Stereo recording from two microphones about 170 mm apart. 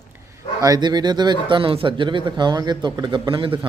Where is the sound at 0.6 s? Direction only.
25° right (ahead or behind).